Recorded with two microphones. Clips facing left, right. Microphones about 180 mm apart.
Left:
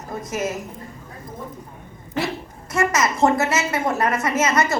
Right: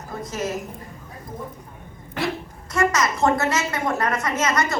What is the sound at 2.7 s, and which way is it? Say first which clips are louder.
A woman's voice: left 1 dB; 20° left (ahead or behind).